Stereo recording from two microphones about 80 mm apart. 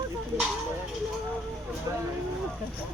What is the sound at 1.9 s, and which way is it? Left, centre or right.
Speech, right.